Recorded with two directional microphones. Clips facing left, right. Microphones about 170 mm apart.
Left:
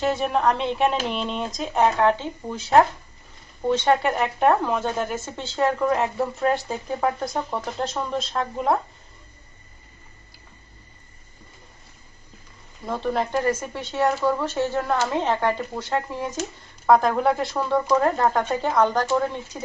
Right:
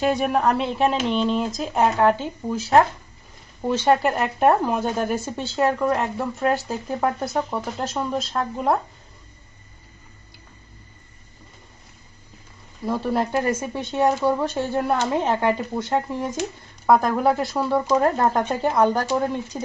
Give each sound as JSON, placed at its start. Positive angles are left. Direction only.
{"t": 0.0, "sound": "speech", "side_deg": -15}
{"t": 12.8, "sound": "speech", "side_deg": -5}
{"t": 16.8, "sound": "speech", "side_deg": 0}